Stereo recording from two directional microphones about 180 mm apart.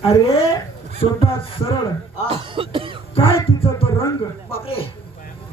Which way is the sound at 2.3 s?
30° right (ahead or behind).